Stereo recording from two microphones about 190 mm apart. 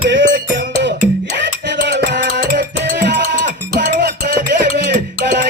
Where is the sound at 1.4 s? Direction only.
60° right (ahead or behind).